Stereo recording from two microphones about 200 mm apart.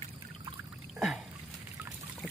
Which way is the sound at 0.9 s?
Centre (ahead or behind).